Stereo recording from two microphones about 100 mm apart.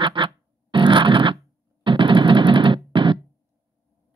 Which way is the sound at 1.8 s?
55° right (ahead or behind).